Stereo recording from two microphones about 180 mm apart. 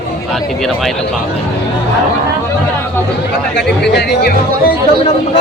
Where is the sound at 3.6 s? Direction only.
65° left (ahead or behind).